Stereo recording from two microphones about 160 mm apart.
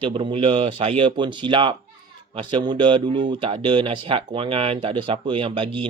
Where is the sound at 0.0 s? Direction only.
30° right (ahead or behind).